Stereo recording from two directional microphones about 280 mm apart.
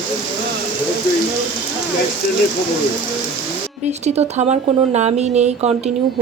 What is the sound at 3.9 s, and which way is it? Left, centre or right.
Speech, right.